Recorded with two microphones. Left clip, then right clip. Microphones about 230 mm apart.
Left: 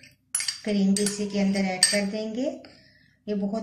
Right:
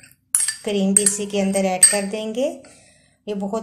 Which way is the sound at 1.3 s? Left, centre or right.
Right.